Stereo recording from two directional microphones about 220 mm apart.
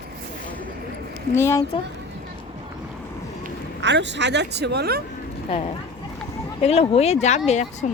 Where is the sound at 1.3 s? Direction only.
10° left (ahead or behind).